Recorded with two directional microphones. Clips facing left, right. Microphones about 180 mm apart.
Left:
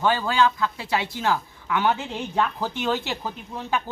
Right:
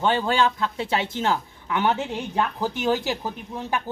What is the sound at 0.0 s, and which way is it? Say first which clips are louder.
A woman's voice: even; 25° right (ahead or behind).